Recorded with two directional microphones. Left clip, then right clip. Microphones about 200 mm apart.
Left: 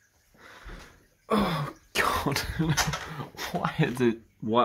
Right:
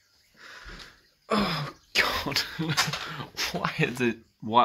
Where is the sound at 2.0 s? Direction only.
30° left (ahead or behind).